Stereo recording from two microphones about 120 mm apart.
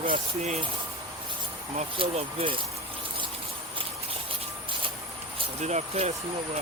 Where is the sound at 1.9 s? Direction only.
50° right (ahead or behind).